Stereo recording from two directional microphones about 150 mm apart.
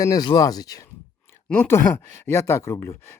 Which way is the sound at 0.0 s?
25° left (ahead or behind).